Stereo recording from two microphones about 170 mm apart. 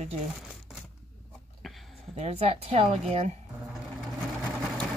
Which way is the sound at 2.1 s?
40° right (ahead or behind).